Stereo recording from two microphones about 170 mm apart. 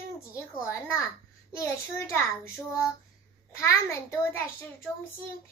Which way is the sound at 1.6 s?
15° left (ahead or behind).